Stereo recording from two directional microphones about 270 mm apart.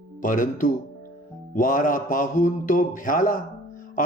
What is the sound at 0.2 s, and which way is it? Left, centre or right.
Speech, left.